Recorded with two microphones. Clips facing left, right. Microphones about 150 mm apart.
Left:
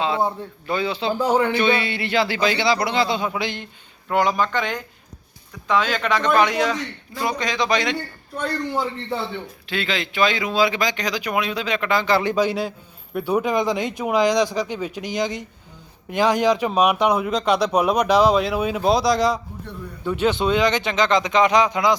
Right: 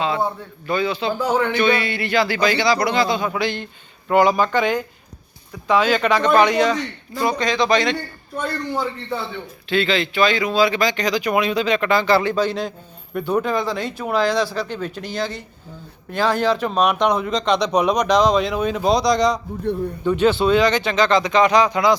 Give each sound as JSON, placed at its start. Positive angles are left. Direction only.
{"t": 0.0, "sound": "a man's voice", "side_deg": 20}
{"t": 1.2, "sound": "speech", "side_deg": 15}
{"t": 4.1, "sound": "a man's voice", "side_deg": 0}
{"t": 9.6, "sound": "speech", "side_deg": 10}